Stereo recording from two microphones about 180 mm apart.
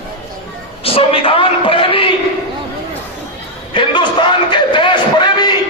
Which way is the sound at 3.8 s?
25° left (ahead or behind).